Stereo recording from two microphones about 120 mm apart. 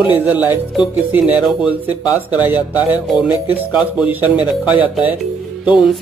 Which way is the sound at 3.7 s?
10° right (ahead or behind).